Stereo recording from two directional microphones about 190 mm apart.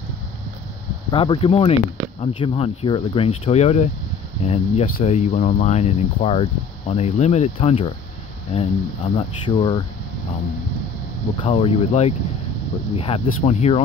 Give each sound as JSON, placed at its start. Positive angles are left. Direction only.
{"t": 1.1, "sound": "speech", "side_deg": 25}
{"t": 11.4, "sound": "speech", "side_deg": 30}